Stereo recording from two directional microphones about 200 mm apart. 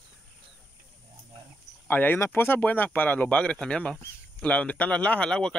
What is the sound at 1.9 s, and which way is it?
Speech, 10° left (ahead or behind).